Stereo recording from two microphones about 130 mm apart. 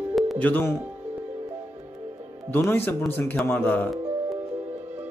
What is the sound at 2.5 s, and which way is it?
A man's voice, 15° left (ahead or behind).